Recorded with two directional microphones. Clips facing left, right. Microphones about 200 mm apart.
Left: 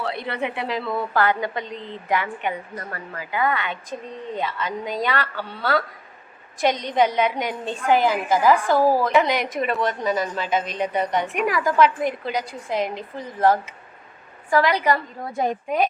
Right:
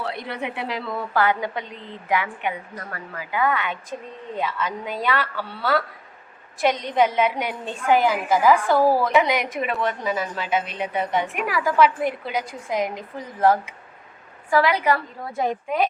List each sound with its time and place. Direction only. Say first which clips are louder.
0.0 s a woman's voice: left 2 dB; 10° right (ahead or behind)
6.8 s a woman's voice: even; 5° right (ahead or behind)
8.6 s a woman's voice: even; 10° left (ahead or behind)
9.0 s a woman's voice: even; 10° right (ahead or behind)
14.5 s a woman's voice: even; 5° right (ahead or behind)